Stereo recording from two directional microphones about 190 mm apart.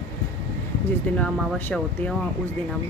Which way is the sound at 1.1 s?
5° left (ahead or behind).